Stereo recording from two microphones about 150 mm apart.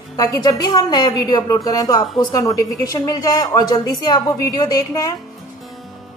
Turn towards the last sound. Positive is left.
turn(degrees=25)  # may be behind; listen again after turning